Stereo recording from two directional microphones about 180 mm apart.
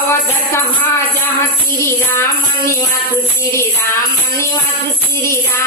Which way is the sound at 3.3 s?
15° left (ahead or behind).